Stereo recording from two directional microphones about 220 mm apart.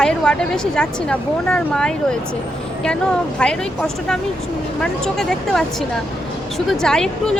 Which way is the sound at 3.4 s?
5° left (ahead or behind).